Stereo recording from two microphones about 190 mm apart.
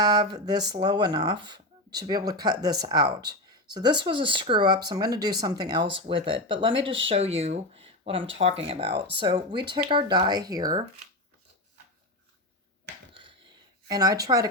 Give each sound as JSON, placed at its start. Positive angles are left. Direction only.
{"t": 0.0, "sound": "speech", "side_deg": -20}
{"t": 13.8, "sound": "speech", "side_deg": -20}